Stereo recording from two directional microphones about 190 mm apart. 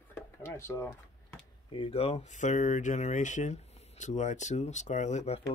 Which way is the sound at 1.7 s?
30° left (ahead or behind).